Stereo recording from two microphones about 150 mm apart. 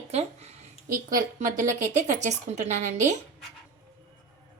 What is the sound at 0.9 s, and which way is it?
A woman's voice, 65° right (ahead or behind).